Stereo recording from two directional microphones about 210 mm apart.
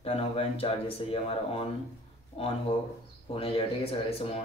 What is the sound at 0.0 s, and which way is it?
Speech, 25° left (ahead or behind).